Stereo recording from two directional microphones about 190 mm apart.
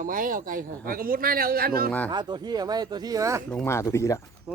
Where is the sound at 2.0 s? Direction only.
20° right (ahead or behind).